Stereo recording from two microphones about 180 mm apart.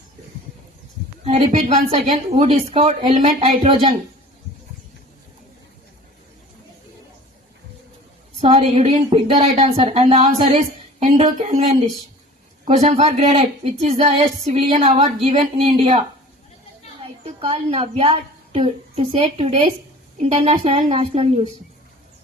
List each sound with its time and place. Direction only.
1.2 s speech: 35° right (ahead or behind)
3.4 s speech: 30° right (ahead or behind)
8.4 s speech: 35° right (ahead or behind)
17.2 s speech: 30° right (ahead or behind)